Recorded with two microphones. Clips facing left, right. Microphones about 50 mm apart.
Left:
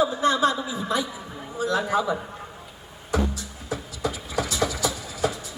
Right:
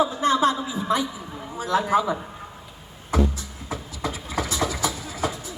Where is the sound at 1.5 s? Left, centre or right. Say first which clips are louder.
Right 2 dB; right.